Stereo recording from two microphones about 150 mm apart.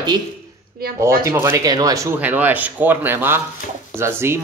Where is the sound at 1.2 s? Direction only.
15° right (ahead or behind).